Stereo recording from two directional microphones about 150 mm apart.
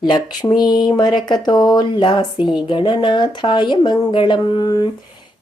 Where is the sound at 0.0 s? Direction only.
30° left (ahead or behind).